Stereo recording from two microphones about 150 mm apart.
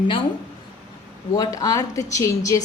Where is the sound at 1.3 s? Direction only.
25° left (ahead or behind).